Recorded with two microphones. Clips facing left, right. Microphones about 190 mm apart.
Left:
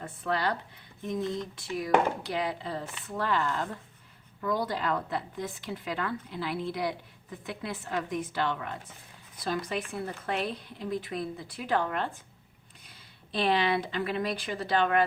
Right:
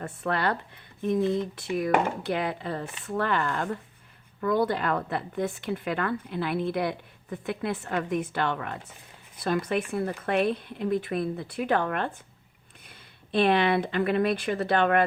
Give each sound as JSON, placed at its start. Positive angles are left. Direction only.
{"t": 0.0, "sound": "speech", "side_deg": -60}